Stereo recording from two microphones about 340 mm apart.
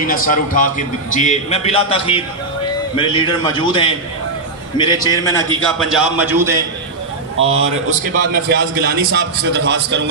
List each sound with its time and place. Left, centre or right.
0.0 s a man's voice: left
5.7 s a man's voice: centre
7.4 s a man's voice: centre
8.3 s a man's voice: right